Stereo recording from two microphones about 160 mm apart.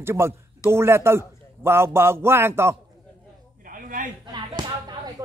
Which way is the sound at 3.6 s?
60° right (ahead or behind).